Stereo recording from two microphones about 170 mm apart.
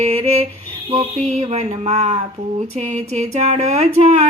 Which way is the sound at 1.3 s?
40° right (ahead or behind).